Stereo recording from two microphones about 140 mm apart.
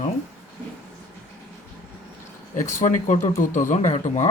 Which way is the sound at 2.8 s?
65° left (ahead or behind).